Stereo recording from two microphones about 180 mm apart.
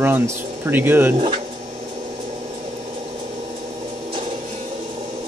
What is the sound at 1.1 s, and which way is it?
Speech, 30° right (ahead or behind).